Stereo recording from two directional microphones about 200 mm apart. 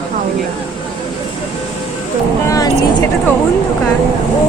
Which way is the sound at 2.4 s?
20° left (ahead or behind).